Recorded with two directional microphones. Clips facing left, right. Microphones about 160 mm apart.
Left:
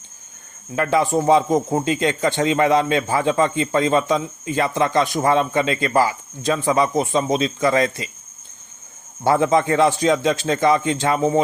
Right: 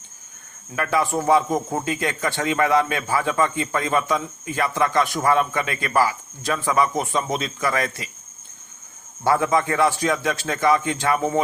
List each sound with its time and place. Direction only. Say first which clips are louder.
0.8 s a man's voice: left 4 dB; 25° left (ahead or behind)
9.2 s a man's voice: left 3 dB; 25° left (ahead or behind)